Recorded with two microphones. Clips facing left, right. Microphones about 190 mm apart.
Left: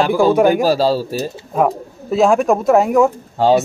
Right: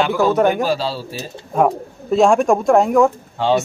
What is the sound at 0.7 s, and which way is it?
Speech, 40° left (ahead or behind).